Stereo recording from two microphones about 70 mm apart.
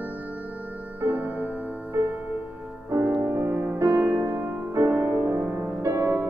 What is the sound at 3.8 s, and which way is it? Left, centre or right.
Music, right.